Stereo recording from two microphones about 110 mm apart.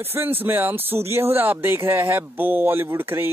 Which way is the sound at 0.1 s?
20° right (ahead or behind).